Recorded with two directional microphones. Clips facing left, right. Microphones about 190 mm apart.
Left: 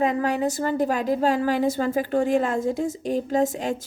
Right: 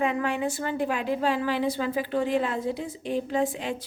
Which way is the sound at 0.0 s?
40° left (ahead or behind).